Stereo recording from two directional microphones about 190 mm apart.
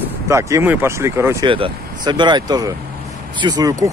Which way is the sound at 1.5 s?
25° right (ahead or behind).